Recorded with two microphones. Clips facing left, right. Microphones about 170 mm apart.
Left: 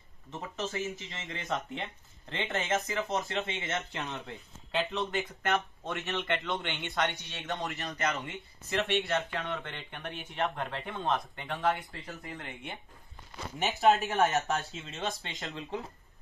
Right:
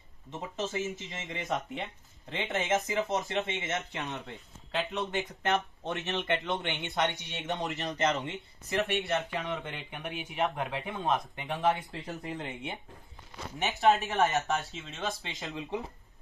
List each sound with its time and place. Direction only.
0.3 s speech: 20° right (ahead or behind)
1.5 s speech: 5° right (ahead or behind)
2.6 s speech: 15° right (ahead or behind)
3.7 s speech: centre (ahead or behind)
5.4 s speech: 20° right (ahead or behind)
13.6 s speech: centre (ahead or behind)